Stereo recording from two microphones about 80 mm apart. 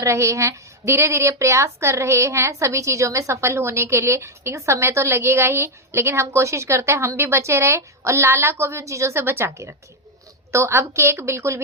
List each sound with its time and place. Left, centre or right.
0.0 s a woman's voice: right